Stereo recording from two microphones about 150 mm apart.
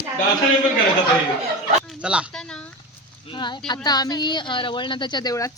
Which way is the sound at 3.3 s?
30° left (ahead or behind).